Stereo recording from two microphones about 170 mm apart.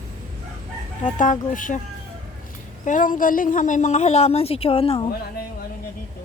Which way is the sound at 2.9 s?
50° left (ahead or behind).